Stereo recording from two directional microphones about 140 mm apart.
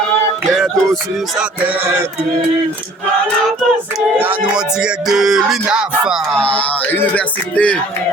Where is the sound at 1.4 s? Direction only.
10° right (ahead or behind).